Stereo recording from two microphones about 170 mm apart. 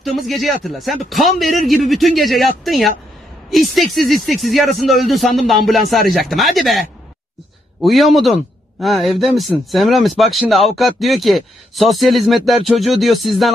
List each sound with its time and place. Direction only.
0.0 s speech: centre (ahead or behind)